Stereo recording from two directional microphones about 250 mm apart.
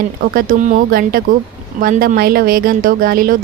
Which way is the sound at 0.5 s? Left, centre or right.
Right.